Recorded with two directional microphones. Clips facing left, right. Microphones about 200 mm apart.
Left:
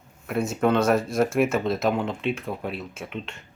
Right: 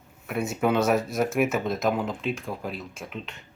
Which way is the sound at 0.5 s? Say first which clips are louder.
Left 2 dB; 5° right (ahead or behind).